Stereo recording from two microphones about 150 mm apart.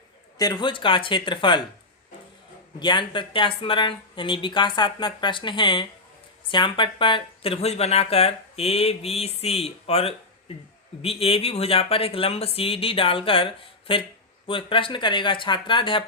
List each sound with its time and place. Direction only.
0.3 s speech: 25° left (ahead or behind)
2.7 s speech: 30° left (ahead or behind)